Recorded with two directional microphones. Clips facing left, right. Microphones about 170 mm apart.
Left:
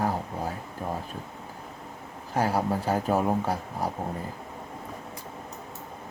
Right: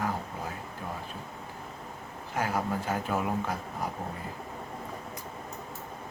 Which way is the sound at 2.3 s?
35° left (ahead or behind).